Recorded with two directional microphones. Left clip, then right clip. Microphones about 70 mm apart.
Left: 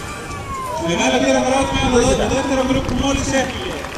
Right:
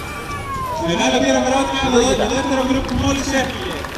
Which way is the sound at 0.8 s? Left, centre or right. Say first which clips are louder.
Even; centre.